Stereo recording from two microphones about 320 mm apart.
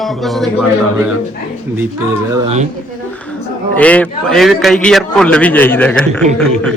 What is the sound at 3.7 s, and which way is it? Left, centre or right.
A man's voice, centre.